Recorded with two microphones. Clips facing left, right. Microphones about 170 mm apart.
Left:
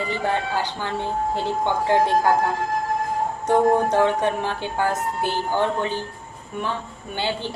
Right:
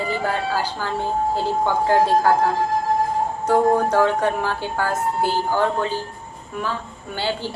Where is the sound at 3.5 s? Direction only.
20° left (ahead or behind).